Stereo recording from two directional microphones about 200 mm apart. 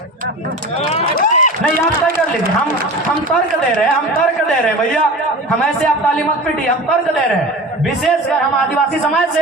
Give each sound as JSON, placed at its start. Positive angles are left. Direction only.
{"t": 1.1, "sound": "run", "side_deg": 40}